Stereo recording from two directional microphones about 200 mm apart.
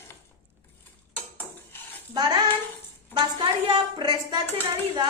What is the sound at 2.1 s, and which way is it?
Child singing, 20° right (ahead or behind).